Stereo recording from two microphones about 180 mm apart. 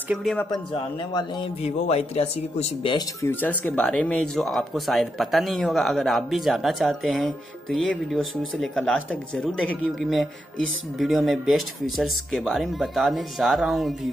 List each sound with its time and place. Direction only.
0.1 s speech: centre (ahead or behind)
1.1 s a man's voice: 30° left (ahead or behind)
3.2 s speech: 10° left (ahead or behind)